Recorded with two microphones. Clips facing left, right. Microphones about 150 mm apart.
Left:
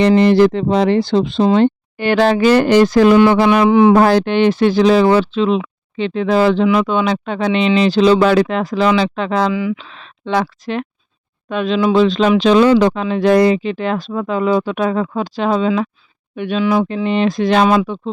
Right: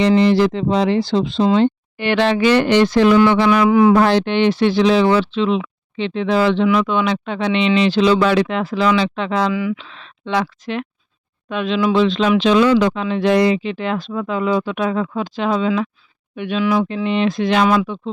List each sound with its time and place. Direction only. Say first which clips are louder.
0.1 s speech: left 3 dB; 55° left (ahead or behind)
3.6 s a man's voice: left 2 dB; 25° left (ahead or behind)
3.9 s speech: left 3 dB; 45° left (ahead or behind)
16.9 s speech: left 2 dB; 40° left (ahead or behind)